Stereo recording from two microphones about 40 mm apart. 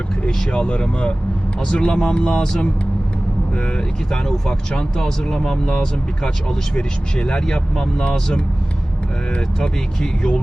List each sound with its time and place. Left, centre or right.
0.5 s speech: left
3.5 s speech: left
4.9 s speech: centre
6.7 s speech: left
9.6 s speech: centre